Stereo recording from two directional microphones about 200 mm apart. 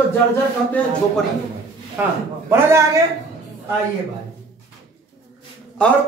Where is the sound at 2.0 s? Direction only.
10° right (ahead or behind).